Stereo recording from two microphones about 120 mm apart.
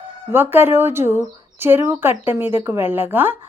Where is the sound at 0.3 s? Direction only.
20° right (ahead or behind).